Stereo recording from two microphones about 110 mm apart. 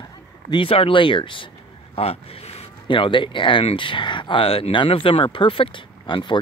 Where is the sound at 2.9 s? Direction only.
50° left (ahead or behind).